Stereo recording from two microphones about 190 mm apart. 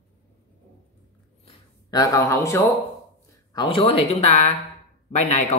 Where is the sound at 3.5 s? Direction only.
30° left (ahead or behind).